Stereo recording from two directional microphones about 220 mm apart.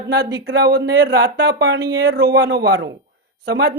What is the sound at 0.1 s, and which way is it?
Speech, 50° right (ahead or behind).